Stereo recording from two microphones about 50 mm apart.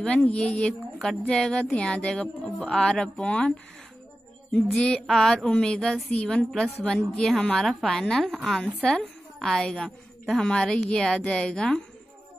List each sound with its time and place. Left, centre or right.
0.0 s a woman's voice: left
4.5 s a woman's voice: centre